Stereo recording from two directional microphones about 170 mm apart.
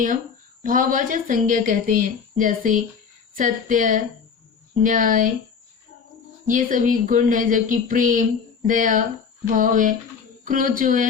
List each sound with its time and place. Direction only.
0.6 s speech: 50° right (ahead or behind)
6.5 s speech: 50° right (ahead or behind)